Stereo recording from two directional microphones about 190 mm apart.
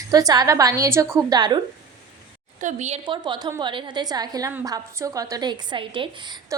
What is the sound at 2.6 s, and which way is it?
A woman's voice, 40° right (ahead or behind).